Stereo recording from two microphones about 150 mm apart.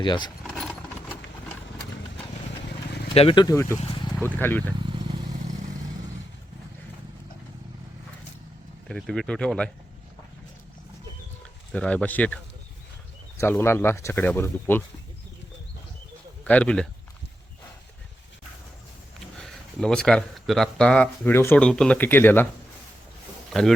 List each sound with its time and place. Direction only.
0.0 s speech: 30° left (ahead or behind)
0.4 s a sound: centre (ahead or behind)
3.2 s speech: 35° left (ahead or behind); by 4.7 s 10° left (ahead or behind)
4.8 s vehicle: 35° right (ahead or behind)
8.9 s speech: centre (ahead or behind)
11.7 s speech: 5° left (ahead or behind)
13.4 s speech: 15° left (ahead or behind)
16.4 s speech: 10° left (ahead or behind)
19.4 s speech: 5° left (ahead or behind)
23.5 s speech: centre (ahead or behind)